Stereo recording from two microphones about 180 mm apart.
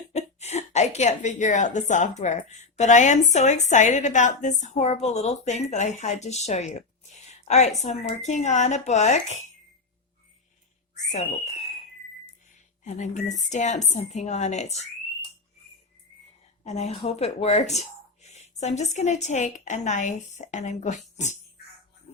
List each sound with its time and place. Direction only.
0.1 s a woman's voice: 35° left (ahead or behind)
11.1 s speech: 40° left (ahead or behind)
12.8 s speech: 40° left (ahead or behind)
16.6 s speech: 40° left (ahead or behind)